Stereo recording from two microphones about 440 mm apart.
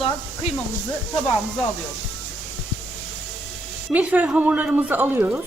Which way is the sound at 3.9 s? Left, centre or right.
Centre.